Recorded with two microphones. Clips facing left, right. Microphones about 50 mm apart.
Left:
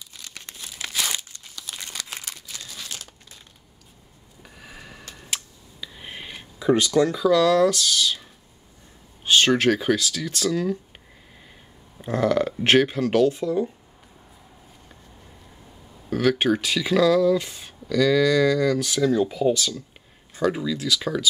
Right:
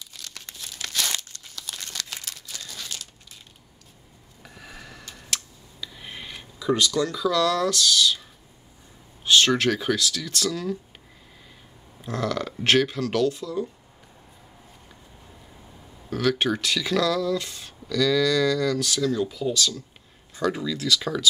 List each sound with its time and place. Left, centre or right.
0.1 s crumpling: centre
4.4 s a sound: centre
5.1 s camera: centre
6.6 s speech: left
9.2 s speech: centre
12.0 s speech: left
16.2 s speech: centre
20.3 s speech: centre